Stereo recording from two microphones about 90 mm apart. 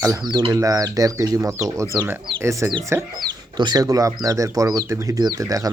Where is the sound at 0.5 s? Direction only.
40° right (ahead or behind).